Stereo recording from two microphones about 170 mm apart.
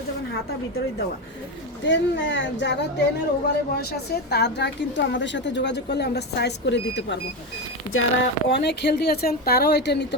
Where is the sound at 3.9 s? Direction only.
75° left (ahead or behind); by 7.2 s 90° left.